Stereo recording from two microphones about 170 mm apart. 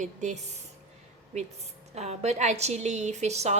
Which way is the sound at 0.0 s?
45° right (ahead or behind).